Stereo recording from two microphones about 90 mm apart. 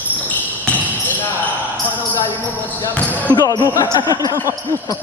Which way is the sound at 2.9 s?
20° left (ahead or behind).